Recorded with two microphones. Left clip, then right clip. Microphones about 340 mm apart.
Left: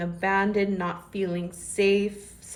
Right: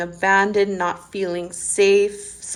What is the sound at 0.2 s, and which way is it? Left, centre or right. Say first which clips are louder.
A woman's voice: right 8 dB; right.